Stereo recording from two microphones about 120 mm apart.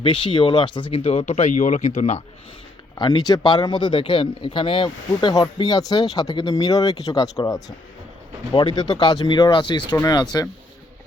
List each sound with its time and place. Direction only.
0.0 s speech: 45° left (ahead or behind); by 1.9 s 90° left
2.0 s speech: 70° left (ahead or behind)
2.9 s speech: 35° left (ahead or behind)